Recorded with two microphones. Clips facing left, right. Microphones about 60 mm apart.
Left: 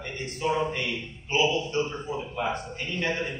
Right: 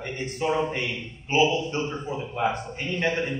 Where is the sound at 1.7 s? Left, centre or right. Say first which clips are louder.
Even; right.